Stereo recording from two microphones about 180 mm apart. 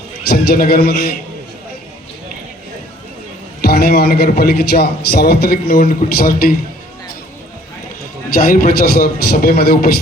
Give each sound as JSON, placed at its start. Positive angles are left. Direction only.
{"t": 0.3, "sound": "a man's voice", "side_deg": 60}
{"t": 3.6, "sound": "a man's voice", "side_deg": 60}
{"t": 8.3, "sound": "a man's voice", "side_deg": 55}